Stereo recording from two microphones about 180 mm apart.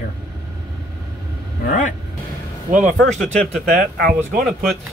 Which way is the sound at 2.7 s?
45° right (ahead or behind).